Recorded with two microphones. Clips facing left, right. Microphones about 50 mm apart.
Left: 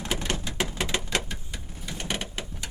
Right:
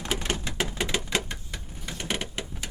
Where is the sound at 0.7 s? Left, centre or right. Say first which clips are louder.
Right 1 dB; centre.